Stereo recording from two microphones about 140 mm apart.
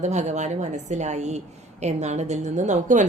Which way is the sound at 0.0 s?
55° right (ahead or behind).